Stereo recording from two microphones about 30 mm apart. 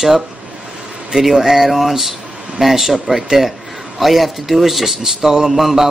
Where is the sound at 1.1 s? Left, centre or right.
Centre.